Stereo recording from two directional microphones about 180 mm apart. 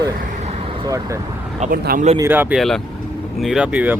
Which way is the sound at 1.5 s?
40° right (ahead or behind).